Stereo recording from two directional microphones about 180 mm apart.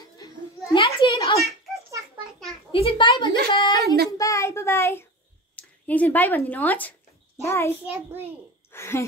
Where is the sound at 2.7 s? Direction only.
30° left (ahead or behind).